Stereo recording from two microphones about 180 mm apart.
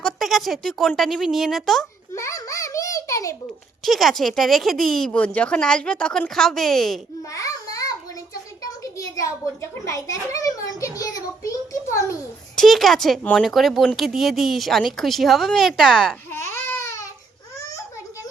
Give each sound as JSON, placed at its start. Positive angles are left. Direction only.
{"t": 0.0, "sound": "speech", "side_deg": 0}
{"t": 2.1, "sound": "a sound", "side_deg": 15}
{"t": 3.8, "sound": "speech", "side_deg": 0}
{"t": 7.3, "sound": "babbling", "side_deg": 20}
{"t": 8.8, "sound": "a child's voice", "side_deg": 20}
{"t": 12.5, "sound": "speech", "side_deg": 0}
{"t": 16.3, "sound": "baby cry", "side_deg": 15}
{"t": 17.6, "sound": "a sound", "side_deg": 20}